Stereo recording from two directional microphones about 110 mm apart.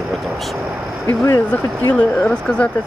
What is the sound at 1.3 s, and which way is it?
Speech, 20° left (ahead or behind).